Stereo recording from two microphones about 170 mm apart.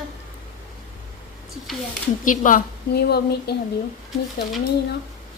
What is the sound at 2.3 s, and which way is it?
Speech, 50° left (ahead or behind).